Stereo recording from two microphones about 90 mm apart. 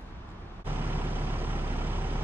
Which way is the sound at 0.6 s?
20° right (ahead or behind).